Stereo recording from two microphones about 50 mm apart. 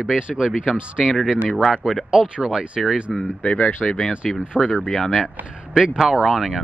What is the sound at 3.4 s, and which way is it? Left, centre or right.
Speech, left.